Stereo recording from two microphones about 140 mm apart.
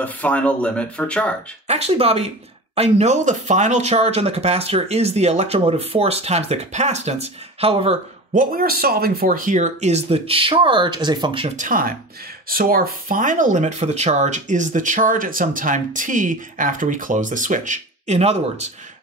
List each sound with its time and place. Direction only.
0.0 s speech: 10° left (ahead or behind)
1.7 s speech: 45° right (ahead or behind)
8.3 s speech: 80° right; by 11.5 s 35° right (ahead or behind)
11.5 s speech: 75° right (ahead or behind)
12.4 s speech: 90° right; by 18.7 s 50° right (ahead or behind)